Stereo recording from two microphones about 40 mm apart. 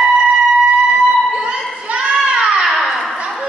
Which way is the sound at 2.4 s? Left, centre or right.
Centre.